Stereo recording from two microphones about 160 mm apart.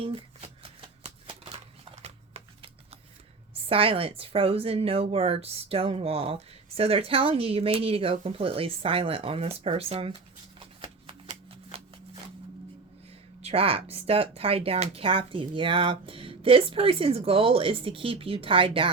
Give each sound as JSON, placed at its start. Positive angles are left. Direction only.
{"t": 0.0, "sound": "shuffling cards", "side_deg": -35}
{"t": 3.5, "sound": "a woman's voice", "side_deg": -35}
{"t": 10.6, "sound": "shuffling cards", "side_deg": -35}
{"t": 11.7, "sound": "a sound", "side_deg": -35}
{"t": 13.4, "sound": "a woman's voice", "side_deg": -35}